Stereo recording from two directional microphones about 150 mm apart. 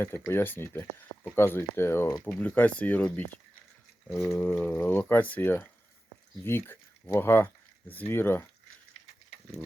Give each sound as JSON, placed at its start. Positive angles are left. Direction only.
{"t": 0.0, "sound": "speech", "side_deg": 15}
{"t": 4.3, "sound": "speech", "side_deg": 10}